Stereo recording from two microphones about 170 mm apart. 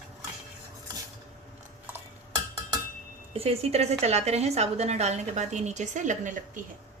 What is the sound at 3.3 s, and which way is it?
A woman's voice, 35° right (ahead or behind).